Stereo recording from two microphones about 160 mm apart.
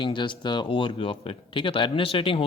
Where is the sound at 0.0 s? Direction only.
30° left (ahead or behind).